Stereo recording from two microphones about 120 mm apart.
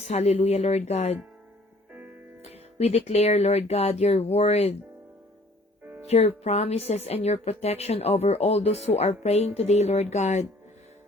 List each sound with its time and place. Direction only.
0.0 s speech: 65° left (ahead or behind)
1.9 s music: 15° right (ahead or behind)
2.4 s speech: 60° left (ahead or behind)
6.1 s speech: 65° left (ahead or behind)